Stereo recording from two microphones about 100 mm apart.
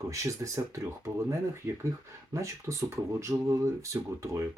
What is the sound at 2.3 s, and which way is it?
Speech, 30° right (ahead or behind).